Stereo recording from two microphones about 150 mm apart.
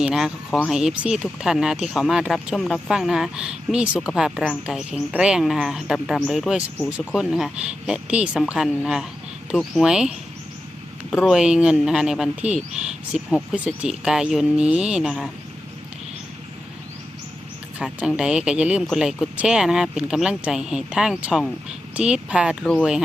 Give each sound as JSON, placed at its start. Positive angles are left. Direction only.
{"t": 0.0, "sound": "speech", "side_deg": -5}
{"t": 17.7, "sound": "a woman's voice", "side_deg": -5}